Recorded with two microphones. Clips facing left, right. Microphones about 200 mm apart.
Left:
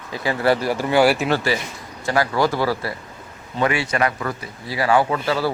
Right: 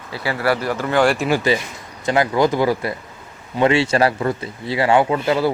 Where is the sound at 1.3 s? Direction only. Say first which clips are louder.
Right 3 dB; 20° right (ahead or behind).